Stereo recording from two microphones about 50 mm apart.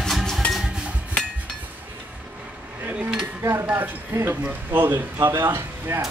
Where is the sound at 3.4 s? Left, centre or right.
Right.